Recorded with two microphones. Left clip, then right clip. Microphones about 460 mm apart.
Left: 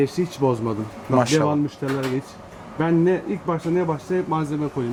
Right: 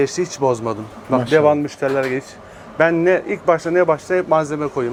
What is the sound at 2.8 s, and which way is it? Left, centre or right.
Speech, right.